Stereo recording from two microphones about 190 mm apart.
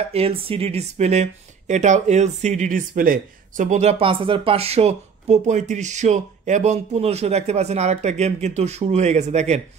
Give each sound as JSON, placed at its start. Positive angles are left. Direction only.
{"t": 0.1, "sound": "speech", "side_deg": -30}